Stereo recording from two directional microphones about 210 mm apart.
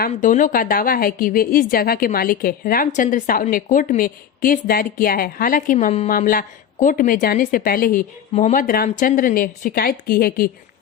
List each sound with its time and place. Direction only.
0.0 s a woman's voice: 40° left (ahead or behind)